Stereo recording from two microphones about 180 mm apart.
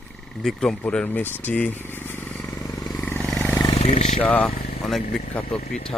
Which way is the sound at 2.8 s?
Centre (ahead or behind).